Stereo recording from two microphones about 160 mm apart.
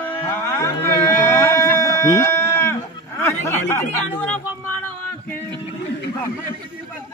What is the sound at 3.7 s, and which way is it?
Speech, 15° left (ahead or behind).